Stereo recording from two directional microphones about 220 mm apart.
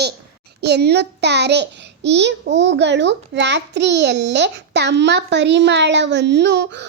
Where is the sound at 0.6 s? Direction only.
50° right (ahead or behind).